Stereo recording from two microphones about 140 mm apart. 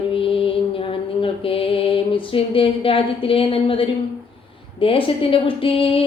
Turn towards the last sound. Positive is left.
turn(degrees=40)  # may be behind; listen again after turning